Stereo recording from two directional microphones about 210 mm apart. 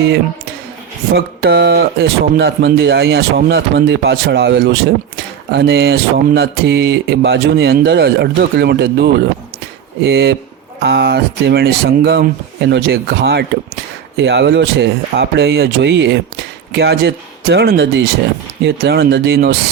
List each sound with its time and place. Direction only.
1.1 s speech: 50° right (ahead or behind)